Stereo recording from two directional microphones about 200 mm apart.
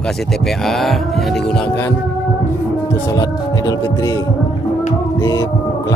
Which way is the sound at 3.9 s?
20° left (ahead or behind).